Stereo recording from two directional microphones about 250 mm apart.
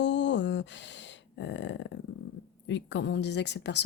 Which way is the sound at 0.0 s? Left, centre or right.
Left.